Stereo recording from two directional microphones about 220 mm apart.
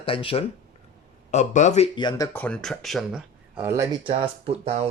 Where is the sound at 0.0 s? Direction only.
25° left (ahead or behind); by 3.8 s 10° right (ahead or behind).